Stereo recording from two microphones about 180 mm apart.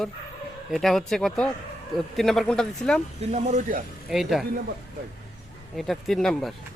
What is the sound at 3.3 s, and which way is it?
Speech, 40° right (ahead or behind).